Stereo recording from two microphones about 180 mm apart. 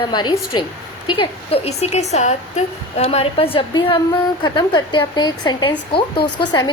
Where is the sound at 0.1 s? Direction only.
25° left (ahead or behind).